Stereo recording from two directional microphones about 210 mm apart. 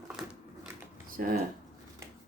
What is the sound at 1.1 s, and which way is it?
Speech, 45° right (ahead or behind).